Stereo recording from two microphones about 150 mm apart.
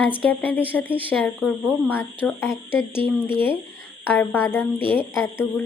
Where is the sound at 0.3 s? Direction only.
10° left (ahead or behind).